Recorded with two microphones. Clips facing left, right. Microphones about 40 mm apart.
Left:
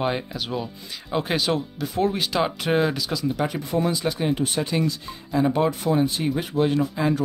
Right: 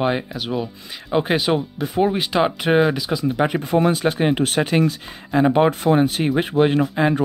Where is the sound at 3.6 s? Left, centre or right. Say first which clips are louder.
Right 5 dB; right.